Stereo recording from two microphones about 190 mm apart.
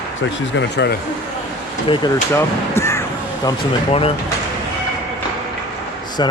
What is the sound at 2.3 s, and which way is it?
Speech, 15° left (ahead or behind).